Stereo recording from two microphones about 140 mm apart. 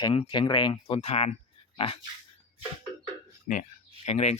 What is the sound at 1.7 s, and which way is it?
Pig, 40° left (ahead or behind).